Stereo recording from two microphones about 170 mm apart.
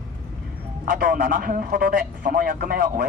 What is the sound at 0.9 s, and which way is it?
Speech, 60° right (ahead or behind).